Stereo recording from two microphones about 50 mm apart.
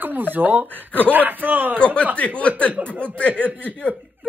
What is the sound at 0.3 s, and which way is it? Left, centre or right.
Speech, right.